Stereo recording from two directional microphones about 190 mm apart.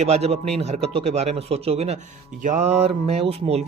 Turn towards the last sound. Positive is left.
turn(degrees=-35)  # may be behind; listen again after turning